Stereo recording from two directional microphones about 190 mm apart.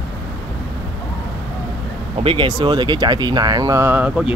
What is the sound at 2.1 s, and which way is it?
Speech, 25° right (ahead or behind).